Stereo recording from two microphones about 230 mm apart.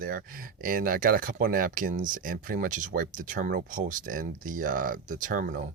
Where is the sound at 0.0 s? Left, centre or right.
Right.